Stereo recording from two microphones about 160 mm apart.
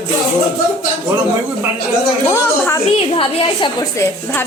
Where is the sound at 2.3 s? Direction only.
15° left (ahead or behind).